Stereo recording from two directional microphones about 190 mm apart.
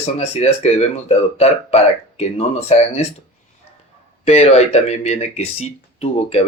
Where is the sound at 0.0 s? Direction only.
35° left (ahead or behind).